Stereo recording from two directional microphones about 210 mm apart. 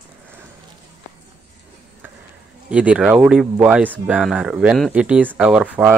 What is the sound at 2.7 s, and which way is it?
Speech, 5° right (ahead or behind).